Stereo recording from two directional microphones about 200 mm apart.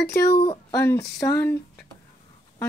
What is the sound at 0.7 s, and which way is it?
Speech, 15° left (ahead or behind).